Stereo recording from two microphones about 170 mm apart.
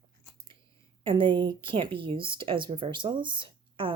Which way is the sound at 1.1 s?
30° right (ahead or behind).